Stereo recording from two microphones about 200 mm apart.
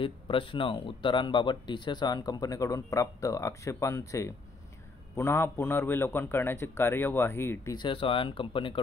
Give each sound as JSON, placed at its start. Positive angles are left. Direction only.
{"t": 0.0, "sound": "a man's voice", "side_deg": 25}